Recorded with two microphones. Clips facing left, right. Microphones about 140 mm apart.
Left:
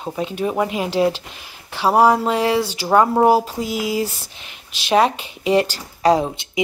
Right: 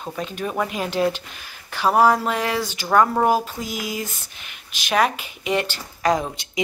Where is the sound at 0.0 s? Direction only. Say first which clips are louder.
Left 5 dB; 20° left (ahead or behind).